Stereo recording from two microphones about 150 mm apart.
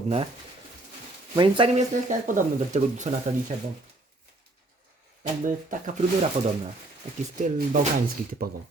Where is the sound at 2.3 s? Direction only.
60° right (ahead or behind).